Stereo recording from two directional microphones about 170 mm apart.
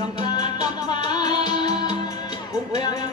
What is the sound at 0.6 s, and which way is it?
Music, 25° left (ahead or behind).